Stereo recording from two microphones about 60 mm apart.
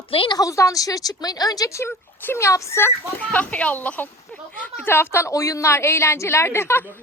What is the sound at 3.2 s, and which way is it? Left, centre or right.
Speech, left.